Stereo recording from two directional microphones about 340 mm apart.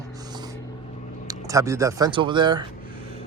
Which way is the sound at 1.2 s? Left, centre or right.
Centre.